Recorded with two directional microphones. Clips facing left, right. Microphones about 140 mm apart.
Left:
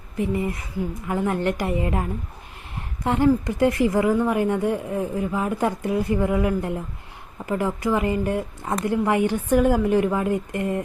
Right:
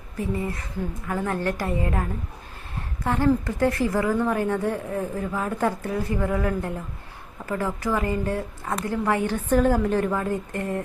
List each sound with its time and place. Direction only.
0.2 s a woman's voice: 20° left (ahead or behind)